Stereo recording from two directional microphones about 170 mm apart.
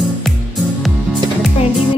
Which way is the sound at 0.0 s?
Centre (ahead or behind).